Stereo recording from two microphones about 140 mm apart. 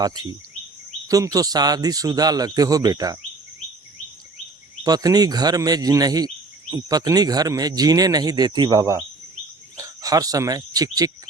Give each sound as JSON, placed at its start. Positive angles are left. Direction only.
{"t": 0.0, "sound": "speech", "side_deg": -30}
{"t": 4.8, "sound": "speech", "side_deg": -25}
{"t": 9.7, "sound": "a sound", "side_deg": -25}